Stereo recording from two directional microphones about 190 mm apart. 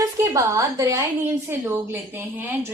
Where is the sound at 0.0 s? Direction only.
20° right (ahead or behind).